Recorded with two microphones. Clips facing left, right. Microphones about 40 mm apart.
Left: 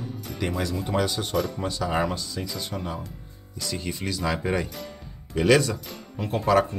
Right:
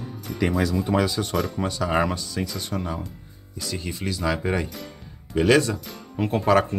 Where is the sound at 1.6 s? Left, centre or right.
Right.